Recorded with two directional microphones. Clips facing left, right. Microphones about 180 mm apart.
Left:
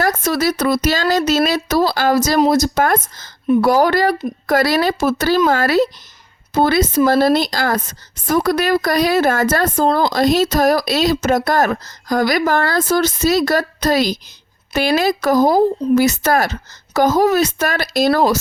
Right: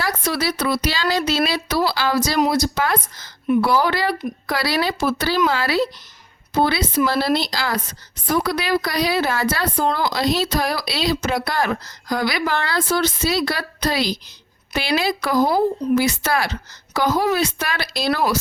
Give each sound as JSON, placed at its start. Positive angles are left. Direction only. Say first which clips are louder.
{"t": 0.0, "sound": "speech", "louder": "left 6 dB", "side_deg": 45}
{"t": 3.4, "sound": "speech", "louder": "left 4 dB", "side_deg": 35}